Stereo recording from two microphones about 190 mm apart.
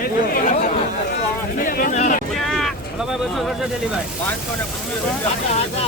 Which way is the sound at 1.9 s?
35° left (ahead or behind).